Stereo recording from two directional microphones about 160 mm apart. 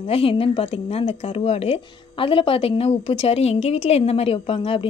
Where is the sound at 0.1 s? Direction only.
35° left (ahead or behind).